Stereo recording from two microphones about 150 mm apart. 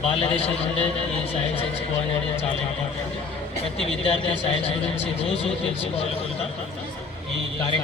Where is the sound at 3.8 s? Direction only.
35° left (ahead or behind).